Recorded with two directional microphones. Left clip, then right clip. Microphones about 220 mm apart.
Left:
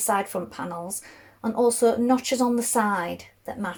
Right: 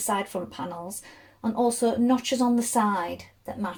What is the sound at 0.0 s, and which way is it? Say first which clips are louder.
A woman's voice: left 3 dB; 15° left (ahead or behind).